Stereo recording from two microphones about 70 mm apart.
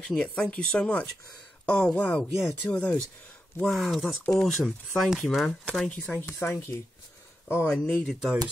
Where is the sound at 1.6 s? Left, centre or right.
Centre.